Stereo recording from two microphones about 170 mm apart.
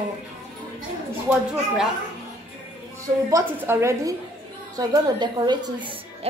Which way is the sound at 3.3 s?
15° right (ahead or behind).